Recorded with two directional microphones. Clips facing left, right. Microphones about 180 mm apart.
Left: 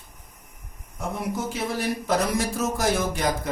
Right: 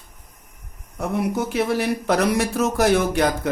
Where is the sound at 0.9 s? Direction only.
65° right (ahead or behind).